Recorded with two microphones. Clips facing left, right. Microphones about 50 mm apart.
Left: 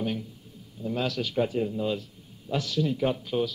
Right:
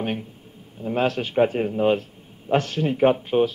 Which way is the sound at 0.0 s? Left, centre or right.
Right.